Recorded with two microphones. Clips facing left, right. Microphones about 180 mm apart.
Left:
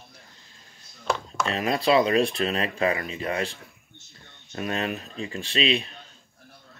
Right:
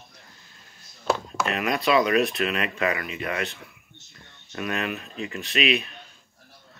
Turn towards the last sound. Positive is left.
turn(degrees=30)  # may be behind; listen again after turning